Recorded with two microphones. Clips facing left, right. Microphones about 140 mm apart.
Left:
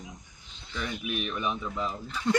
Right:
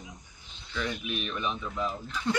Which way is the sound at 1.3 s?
5° left (ahead or behind).